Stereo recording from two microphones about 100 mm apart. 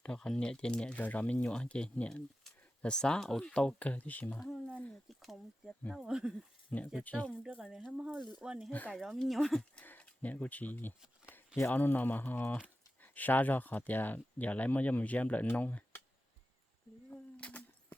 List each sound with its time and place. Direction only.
0.0 s speech: 10° left (ahead or behind)
4.4 s speech: centre (ahead or behind)
7.0 s speech: 15° left (ahead or behind)
7.3 s speech: 10° right (ahead or behind); by 9.8 s 5° left (ahead or behind)
9.8 s speech: 15° left (ahead or behind)
17.1 s a sound: 15° left (ahead or behind)